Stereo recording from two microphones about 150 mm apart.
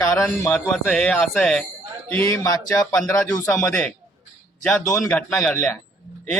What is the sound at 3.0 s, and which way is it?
Speech, 20° left (ahead or behind).